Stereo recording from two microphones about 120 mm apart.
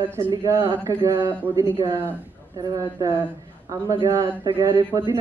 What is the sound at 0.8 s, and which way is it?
A man's voice, 25° right (ahead or behind).